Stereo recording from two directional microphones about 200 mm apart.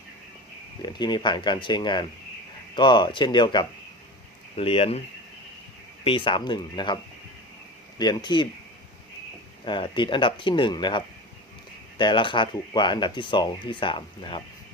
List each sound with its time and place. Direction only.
0.8 s speech: 20° left (ahead or behind)
6.1 s speech: 25° left (ahead or behind)
9.6 s speech: 25° left (ahead or behind)